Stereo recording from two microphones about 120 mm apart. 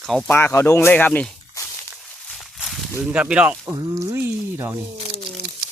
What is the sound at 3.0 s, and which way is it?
Speech, 10° right (ahead or behind).